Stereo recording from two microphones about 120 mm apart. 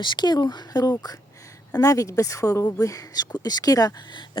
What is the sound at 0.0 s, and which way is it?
Speech, 40° left (ahead or behind).